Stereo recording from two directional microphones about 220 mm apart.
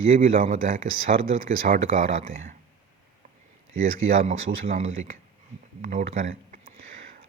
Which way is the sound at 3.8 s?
40° right (ahead or behind).